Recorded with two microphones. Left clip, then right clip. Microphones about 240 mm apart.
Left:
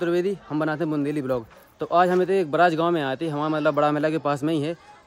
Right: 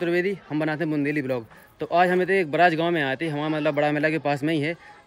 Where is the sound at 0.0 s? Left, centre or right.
Centre.